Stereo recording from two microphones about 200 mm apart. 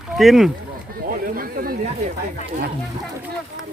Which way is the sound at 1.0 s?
45° right (ahead or behind).